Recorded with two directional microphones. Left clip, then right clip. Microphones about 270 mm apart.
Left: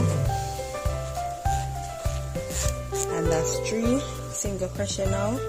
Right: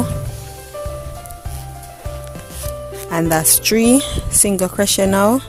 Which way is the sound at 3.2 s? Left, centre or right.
Right.